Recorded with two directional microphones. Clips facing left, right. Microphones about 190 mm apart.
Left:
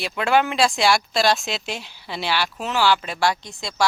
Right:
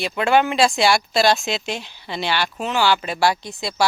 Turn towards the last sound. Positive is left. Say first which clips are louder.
# right 3 dB
turn(degrees=-5)  # may be behind; listen again after turning